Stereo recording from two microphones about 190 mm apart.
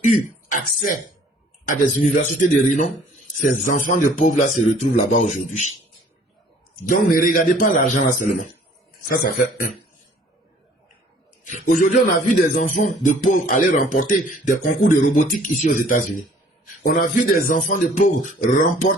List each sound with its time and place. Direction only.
0.0 s speech: 40° left (ahead or behind)
6.8 s speech: 50° left (ahead or behind)
11.6 s speech: 45° left (ahead or behind)